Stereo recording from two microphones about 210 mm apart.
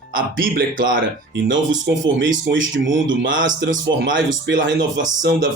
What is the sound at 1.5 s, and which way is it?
Speech, 65° right (ahead or behind).